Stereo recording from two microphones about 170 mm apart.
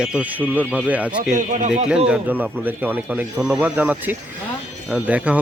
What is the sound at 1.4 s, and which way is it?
Speech, 45° right (ahead or behind).